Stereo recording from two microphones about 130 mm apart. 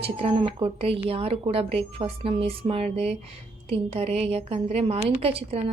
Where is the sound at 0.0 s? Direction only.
45° right (ahead or behind).